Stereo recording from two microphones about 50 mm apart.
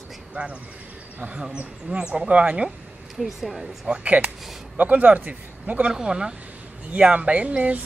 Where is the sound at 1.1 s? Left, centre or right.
Right.